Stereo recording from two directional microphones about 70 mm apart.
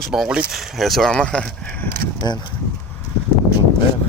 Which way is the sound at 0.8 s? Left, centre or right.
Centre.